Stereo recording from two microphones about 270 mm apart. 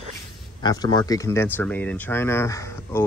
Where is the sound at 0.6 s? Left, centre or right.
Centre.